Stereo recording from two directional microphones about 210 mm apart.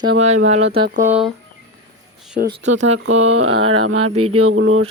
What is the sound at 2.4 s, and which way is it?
Speech, 45° right (ahead or behind).